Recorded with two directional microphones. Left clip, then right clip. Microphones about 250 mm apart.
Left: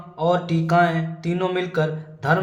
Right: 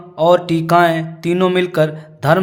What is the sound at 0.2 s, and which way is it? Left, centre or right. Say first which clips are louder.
Music: right 9 dB; right.